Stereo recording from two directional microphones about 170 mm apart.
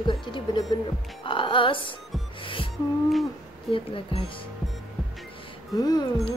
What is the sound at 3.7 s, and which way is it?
Speech, 30° left (ahead or behind).